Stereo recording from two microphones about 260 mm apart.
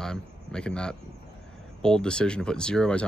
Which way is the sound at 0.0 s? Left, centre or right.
Centre.